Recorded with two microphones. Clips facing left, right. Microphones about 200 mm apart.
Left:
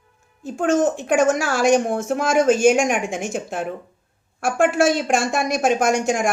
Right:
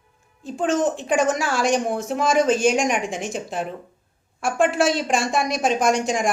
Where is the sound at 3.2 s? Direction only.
50° left (ahead or behind).